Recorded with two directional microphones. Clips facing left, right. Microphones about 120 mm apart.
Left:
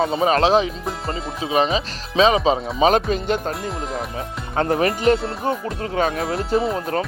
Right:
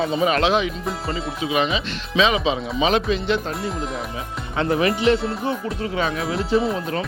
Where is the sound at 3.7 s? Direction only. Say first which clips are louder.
Even; centre (ahead or behind).